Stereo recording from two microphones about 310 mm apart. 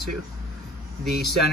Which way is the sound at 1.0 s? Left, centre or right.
Centre.